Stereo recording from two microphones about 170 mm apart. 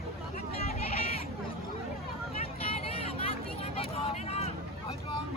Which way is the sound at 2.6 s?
35° left (ahead or behind).